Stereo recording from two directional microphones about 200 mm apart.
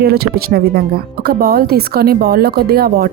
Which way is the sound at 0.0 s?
50° right (ahead or behind).